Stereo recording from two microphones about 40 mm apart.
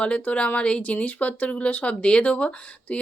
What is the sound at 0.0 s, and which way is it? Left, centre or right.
Speech, left.